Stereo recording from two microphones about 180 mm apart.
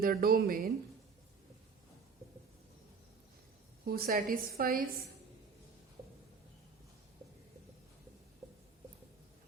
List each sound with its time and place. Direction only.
0.0 s a woman's voice: 55° right (ahead or behind)
3.8 s a woman's voice: 55° right (ahead or behind)